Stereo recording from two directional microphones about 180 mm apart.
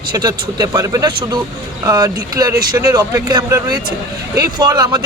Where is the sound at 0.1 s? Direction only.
20° right (ahead or behind).